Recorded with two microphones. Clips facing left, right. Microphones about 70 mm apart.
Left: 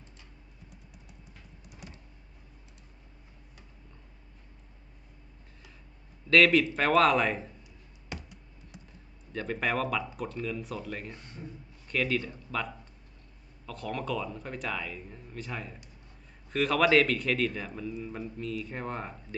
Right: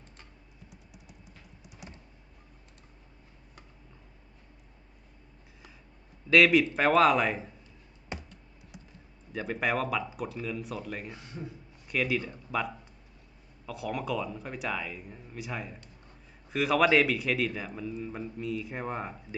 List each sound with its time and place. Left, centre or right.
6.3 s speech: centre
8.1 s computer keyboard: right
9.3 s speech: centre